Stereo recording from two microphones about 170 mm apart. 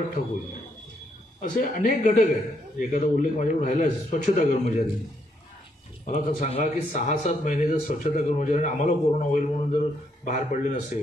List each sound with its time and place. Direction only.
1.4 s speech: 50° left (ahead or behind)
6.0 s speech: 50° left (ahead or behind)